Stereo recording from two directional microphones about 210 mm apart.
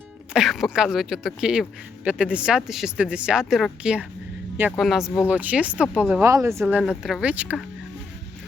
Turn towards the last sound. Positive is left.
turn(degrees=-5)  # may be behind; listen again after turning